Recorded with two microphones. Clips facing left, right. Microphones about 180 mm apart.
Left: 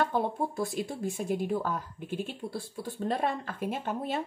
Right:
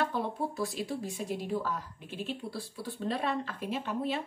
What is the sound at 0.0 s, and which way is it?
Speech, 50° left (ahead or behind).